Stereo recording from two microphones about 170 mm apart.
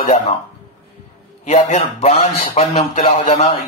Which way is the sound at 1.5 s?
40° left (ahead or behind).